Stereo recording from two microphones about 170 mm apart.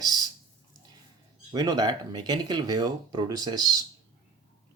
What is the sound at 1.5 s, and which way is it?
Speech, 25° right (ahead or behind).